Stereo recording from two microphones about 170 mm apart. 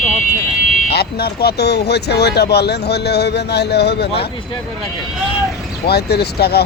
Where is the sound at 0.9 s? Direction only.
70° left (ahead or behind).